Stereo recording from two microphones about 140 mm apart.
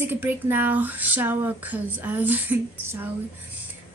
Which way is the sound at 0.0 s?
15° right (ahead or behind).